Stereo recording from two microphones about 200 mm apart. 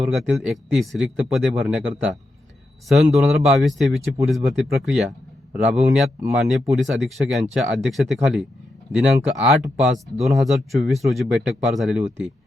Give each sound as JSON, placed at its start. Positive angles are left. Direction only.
{"t": 0.0, "sound": "speech", "side_deg": 0}